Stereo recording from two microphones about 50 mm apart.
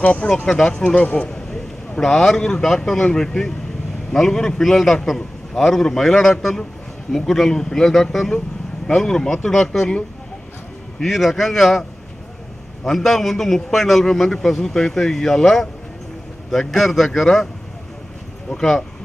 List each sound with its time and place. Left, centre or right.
0.0 s speech: left
1.3 s a sound: centre
2.6 s a man's voice: centre
12.8 s a man's voice: centre
18.6 s a man's voice: centre